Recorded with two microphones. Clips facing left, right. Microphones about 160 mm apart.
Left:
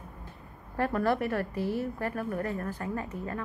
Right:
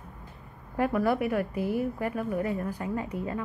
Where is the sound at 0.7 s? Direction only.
10° right (ahead or behind).